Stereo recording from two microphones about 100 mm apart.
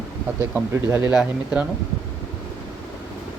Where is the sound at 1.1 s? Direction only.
10° right (ahead or behind).